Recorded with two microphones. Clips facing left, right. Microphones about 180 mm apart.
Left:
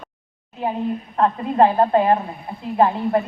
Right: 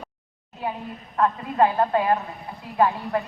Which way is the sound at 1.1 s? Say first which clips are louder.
Left 3 dB; 30° left (ahead or behind).